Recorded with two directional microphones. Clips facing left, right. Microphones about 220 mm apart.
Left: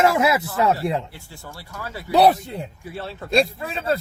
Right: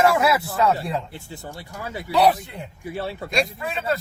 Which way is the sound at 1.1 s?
20° right (ahead or behind).